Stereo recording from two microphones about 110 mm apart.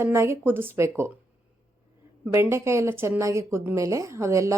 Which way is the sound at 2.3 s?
20° right (ahead or behind).